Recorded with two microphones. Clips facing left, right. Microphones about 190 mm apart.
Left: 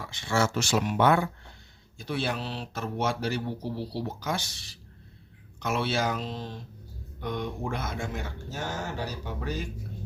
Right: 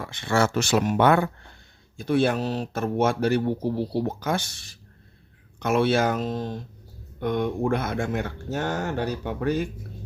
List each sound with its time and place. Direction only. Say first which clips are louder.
0.0 s speech: right 4 dB; 55° right (ahead or behind)